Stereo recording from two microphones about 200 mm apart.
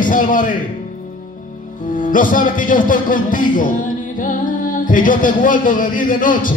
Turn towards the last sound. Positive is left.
turn(degrees=45)  # may be behind; listen again after turning